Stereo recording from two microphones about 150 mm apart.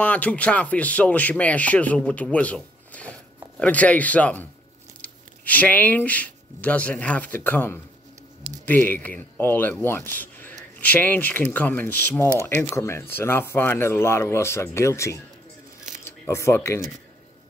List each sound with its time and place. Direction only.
0.0 s speech: 10° left (ahead or behind)